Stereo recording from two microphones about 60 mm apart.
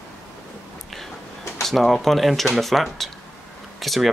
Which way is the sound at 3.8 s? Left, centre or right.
Centre.